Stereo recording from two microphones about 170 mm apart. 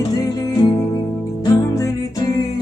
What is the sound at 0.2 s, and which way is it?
Music, 20° left (ahead or behind).